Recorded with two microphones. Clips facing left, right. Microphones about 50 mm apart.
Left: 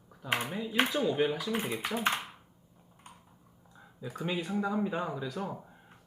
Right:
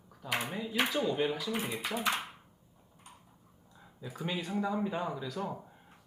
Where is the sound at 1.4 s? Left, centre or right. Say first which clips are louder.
Left 2 dB; left.